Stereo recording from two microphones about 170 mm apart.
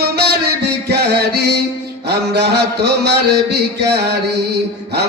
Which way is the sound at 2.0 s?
75° right (ahead or behind).